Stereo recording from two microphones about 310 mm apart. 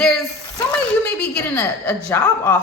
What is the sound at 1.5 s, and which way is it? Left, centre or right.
Speech, centre.